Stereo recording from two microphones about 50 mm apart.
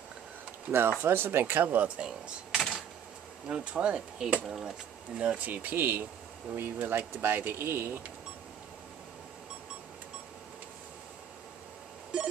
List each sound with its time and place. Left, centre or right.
0.7 s speech: right
2.0 s speech: centre
3.4 s speech: right
4.5 s speech: centre
5.1 s speech: right
12.1 s a sound: centre